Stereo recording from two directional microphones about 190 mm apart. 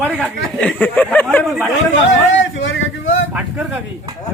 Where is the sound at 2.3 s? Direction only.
80° left.